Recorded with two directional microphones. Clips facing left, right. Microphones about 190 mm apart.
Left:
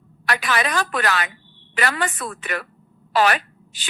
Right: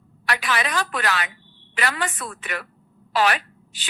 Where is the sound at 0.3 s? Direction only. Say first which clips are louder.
Left 2 dB; 45° left (ahead or behind).